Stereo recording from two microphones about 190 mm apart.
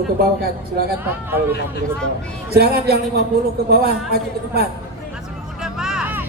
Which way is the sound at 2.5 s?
55° right (ahead or behind).